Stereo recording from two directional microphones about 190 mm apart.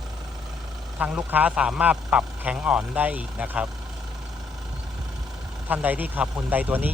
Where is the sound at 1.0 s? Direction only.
5° right (ahead or behind).